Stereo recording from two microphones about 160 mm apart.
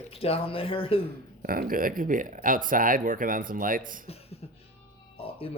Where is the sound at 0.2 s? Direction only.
35° left (ahead or behind).